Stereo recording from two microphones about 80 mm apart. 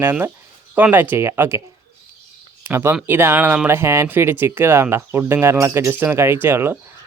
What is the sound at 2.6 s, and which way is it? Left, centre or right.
Speech, right.